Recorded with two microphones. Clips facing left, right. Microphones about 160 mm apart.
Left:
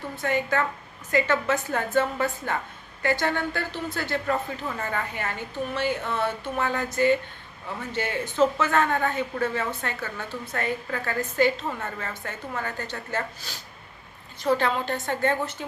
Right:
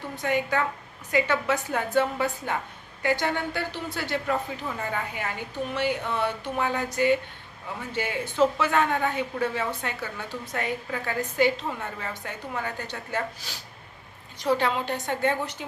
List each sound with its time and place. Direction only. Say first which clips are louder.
0.2 s speech: even; 15° right (ahead or behind)